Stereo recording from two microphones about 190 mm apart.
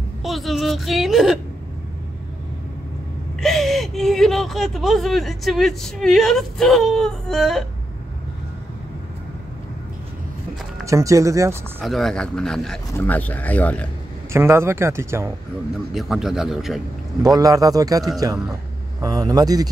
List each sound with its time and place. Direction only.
0.2 s a woman's voice: centre (ahead or behind)
3.3 s speech: centre (ahead or behind)
10.9 s speech: 15° right (ahead or behind)
11.8 s speech: centre (ahead or behind)
14.3 s speech: 15° right (ahead or behind)
15.9 s speech: centre (ahead or behind)
17.2 s a man's voice: 20° right (ahead or behind)